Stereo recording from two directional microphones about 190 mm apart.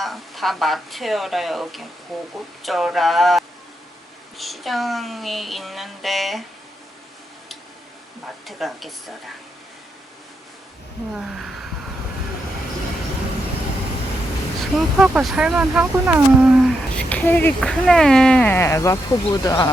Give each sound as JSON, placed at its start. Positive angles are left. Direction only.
{"t": 0.0, "sound": "speech", "side_deg": 0}
{"t": 8.4, "sound": "speech", "side_deg": 0}
{"t": 11.1, "sound": "speech", "side_deg": 0}
{"t": 14.8, "sound": "speech", "side_deg": -5}